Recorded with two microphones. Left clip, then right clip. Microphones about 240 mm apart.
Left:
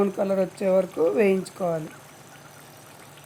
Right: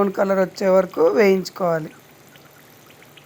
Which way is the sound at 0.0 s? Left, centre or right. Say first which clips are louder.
Right 5 dB; centre.